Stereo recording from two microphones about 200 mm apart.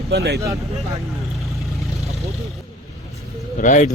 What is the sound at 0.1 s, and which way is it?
Speech, 55° right (ahead or behind).